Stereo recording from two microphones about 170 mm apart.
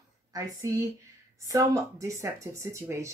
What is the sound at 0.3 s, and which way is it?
Speech, 15° right (ahead or behind).